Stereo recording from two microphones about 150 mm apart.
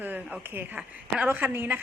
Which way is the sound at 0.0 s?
10° right (ahead or behind).